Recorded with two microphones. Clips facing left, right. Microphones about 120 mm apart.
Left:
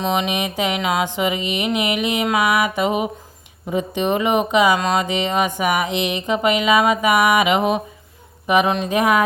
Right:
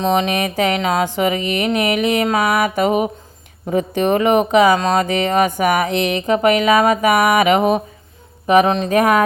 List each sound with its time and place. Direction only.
0.0 s speech: 40° right (ahead or behind)